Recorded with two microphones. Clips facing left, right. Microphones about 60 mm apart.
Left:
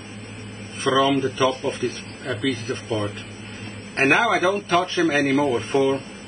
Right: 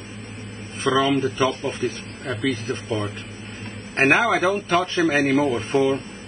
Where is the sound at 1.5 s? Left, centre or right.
Right.